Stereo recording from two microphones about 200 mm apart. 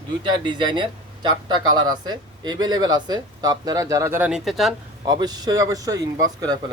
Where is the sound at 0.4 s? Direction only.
20° right (ahead or behind); by 4.7 s centre (ahead or behind).